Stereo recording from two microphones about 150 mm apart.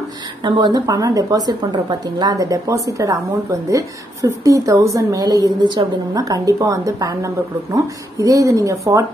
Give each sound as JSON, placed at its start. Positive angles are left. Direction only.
{"t": 0.4, "sound": "a woman's voice", "side_deg": -30}